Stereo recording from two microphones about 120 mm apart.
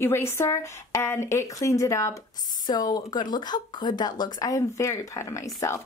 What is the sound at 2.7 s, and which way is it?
A woman's voice, 35° left (ahead or behind).